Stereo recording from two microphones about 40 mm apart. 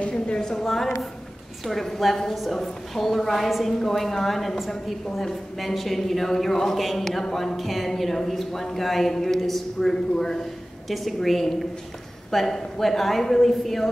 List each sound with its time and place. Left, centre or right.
0.3 s a woman's voice: centre
1.6 s a woman's voice: centre
10.9 s a woman's voice: centre